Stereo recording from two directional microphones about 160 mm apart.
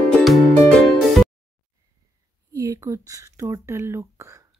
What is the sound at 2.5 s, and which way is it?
Speech, 20° right (ahead or behind).